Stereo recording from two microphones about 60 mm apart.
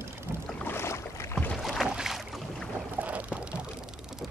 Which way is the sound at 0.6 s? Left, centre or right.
Left.